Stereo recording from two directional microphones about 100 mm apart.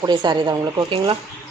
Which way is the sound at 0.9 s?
50° right (ahead or behind).